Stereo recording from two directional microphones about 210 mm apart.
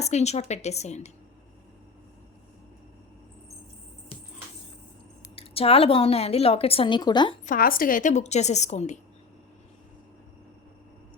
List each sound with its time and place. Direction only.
0.0 s a woman's voice: 30° left (ahead or behind)
5.4 s a woman's voice: 25° left (ahead or behind)
7.4 s a woman's voice: 40° left (ahead or behind)